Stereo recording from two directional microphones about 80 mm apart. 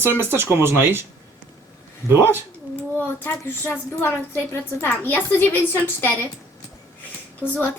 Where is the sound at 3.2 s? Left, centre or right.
Left.